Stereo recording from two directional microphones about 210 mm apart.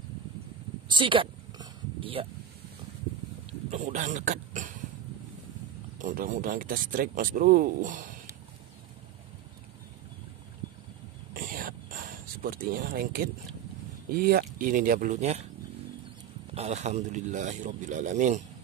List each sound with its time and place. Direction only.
0.8 s a sound: 25° right (ahead or behind)
3.7 s speech: 35° right (ahead or behind)
5.9 s speech: 40° right (ahead or behind)
11.3 s a sound: 40° right (ahead or behind)
14.1 s speech: 45° right (ahead or behind)
16.5 s speech: 30° right (ahead or behind)